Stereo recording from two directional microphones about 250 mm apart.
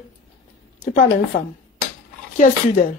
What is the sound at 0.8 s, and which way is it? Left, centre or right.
Speech, left.